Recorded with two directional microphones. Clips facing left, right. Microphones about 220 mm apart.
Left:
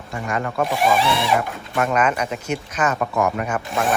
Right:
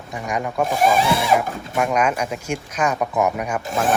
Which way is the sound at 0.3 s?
15° right (ahead or behind).